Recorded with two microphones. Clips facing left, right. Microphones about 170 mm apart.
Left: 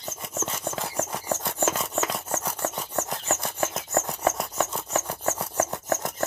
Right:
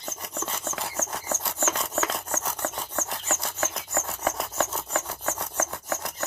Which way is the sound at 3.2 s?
15° left (ahead or behind).